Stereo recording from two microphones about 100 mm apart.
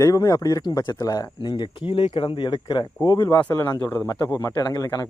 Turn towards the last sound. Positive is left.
turn(degrees=35)  # may be behind; listen again after turning